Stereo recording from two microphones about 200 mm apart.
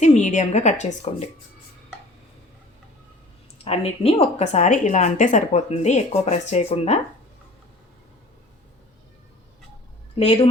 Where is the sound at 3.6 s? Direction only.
30° left (ahead or behind).